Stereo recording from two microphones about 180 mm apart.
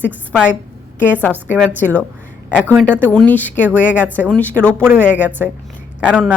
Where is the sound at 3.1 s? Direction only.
10° left (ahead or behind).